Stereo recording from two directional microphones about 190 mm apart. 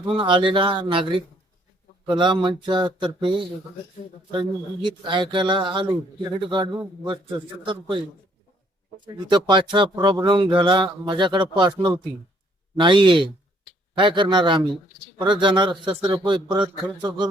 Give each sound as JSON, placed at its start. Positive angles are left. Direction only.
{"t": 0.0, "sound": "speech", "side_deg": -25}
{"t": 9.1, "sound": "speech", "side_deg": -25}